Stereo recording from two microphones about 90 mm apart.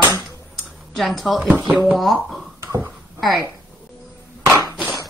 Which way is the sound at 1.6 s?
15° right (ahead or behind).